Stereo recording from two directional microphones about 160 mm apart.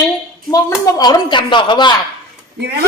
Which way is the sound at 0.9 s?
25° left (ahead or behind).